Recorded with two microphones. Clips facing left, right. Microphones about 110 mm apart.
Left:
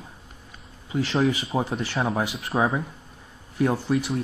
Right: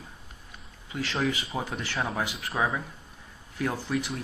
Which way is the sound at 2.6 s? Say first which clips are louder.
Left 5 dB; 25° left (ahead or behind).